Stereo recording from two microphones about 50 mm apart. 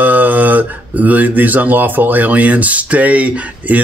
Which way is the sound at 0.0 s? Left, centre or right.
Right.